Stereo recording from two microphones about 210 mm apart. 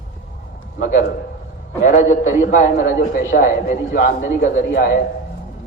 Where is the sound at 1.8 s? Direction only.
35° left (ahead or behind).